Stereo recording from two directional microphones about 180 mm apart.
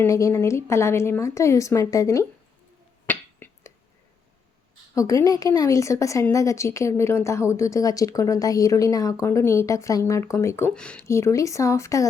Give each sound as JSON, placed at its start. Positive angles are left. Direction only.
{"t": 0.0, "sound": "a woman's voice", "side_deg": 15}
{"t": 3.1, "sound": "a sound", "side_deg": 10}
{"t": 4.9, "sound": "a woman's voice", "side_deg": 20}
{"t": 11.0, "sound": "a woman's voice", "side_deg": 15}